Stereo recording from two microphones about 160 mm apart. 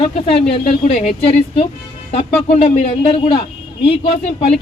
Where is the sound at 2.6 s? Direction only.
50° left (ahead or behind).